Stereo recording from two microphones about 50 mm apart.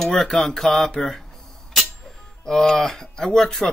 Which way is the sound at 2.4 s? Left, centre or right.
Centre.